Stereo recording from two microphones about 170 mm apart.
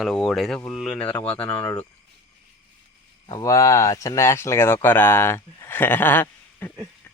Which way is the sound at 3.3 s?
20° left (ahead or behind).